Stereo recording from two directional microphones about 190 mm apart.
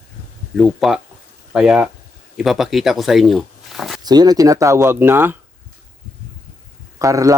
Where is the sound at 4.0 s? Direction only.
20° right (ahead or behind).